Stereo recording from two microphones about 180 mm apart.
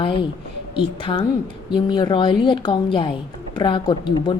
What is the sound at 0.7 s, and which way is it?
A woman's voice, 30° left (ahead or behind).